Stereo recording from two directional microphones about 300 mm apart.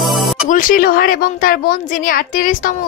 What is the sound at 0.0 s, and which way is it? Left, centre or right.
Music, centre.